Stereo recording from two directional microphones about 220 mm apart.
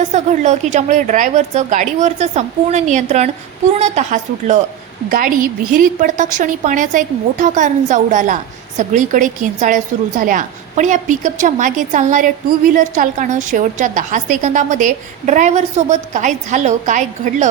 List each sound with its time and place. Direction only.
0.1 s a woman's voice: 30° right (ahead or behind)